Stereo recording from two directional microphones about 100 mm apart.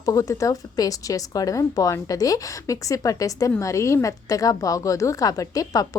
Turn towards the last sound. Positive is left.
turn(degrees=35)  # may be behind; listen again after turning